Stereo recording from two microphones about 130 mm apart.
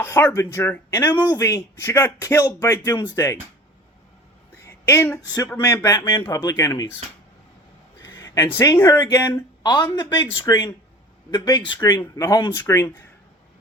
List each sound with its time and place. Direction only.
0.0 s speech: 20° left (ahead or behind)
4.6 s speech: 20° left (ahead or behind)
8.2 s speech: 25° left (ahead or behind)